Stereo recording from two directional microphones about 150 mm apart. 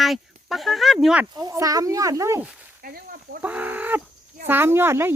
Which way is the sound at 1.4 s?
25° right (ahead or behind).